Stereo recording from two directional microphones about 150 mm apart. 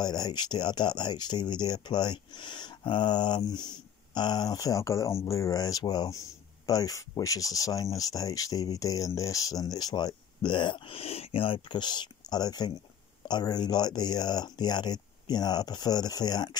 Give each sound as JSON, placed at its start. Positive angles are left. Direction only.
{"t": 0.0, "sound": "speech", "side_deg": 25}